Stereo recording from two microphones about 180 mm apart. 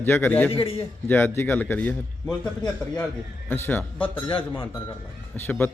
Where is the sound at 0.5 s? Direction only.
30° left (ahead or behind).